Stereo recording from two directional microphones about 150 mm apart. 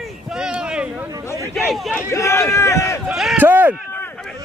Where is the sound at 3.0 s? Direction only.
Centre (ahead or behind).